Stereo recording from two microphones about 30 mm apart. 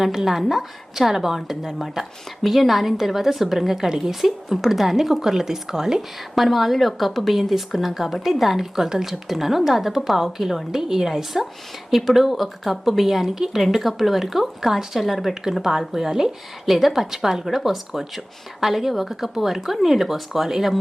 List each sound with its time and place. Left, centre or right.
0.0 s a woman's voice: centre
6.3 s a woman's voice: centre
16.0 s speech: centre
16.6 s a woman's voice: centre
17.4 s a woman's voice: centre